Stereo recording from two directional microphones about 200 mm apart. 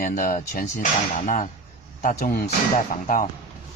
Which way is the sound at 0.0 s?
40° left (ahead or behind).